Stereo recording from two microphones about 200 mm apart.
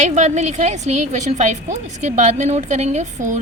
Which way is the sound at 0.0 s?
35° right (ahead or behind).